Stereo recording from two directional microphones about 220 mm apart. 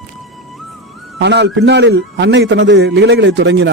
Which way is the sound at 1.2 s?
50° right (ahead or behind).